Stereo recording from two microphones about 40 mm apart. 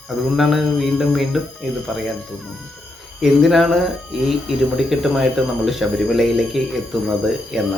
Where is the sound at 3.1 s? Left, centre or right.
Centre.